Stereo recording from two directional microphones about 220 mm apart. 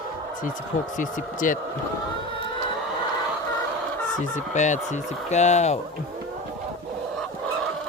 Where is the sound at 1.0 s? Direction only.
35° left (ahead or behind).